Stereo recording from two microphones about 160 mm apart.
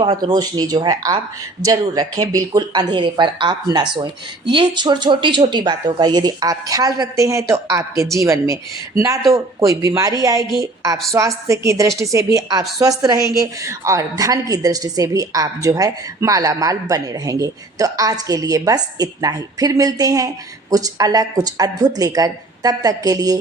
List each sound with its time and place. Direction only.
0.0 s a woman's voice: 30° right (ahead or behind)